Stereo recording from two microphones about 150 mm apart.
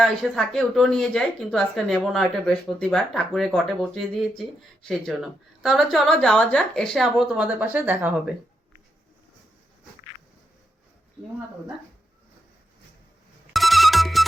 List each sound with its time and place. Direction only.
0.0 s a woman's voice: 5° left (ahead or behind)
13.5 s music: centre (ahead or behind)